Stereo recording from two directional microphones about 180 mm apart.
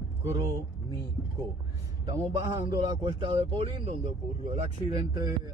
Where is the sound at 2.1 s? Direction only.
20° right (ahead or behind).